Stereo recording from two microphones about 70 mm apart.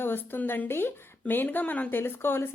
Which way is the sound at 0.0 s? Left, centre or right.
Left.